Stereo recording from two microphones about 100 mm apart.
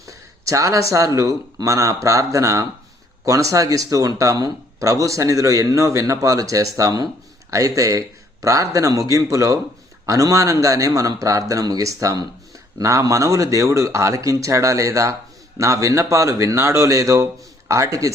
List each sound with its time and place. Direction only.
0.0 s speech: 35° right (ahead or behind)